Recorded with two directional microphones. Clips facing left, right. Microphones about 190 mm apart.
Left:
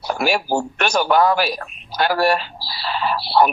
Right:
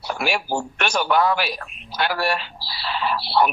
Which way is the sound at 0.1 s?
40° left (ahead or behind).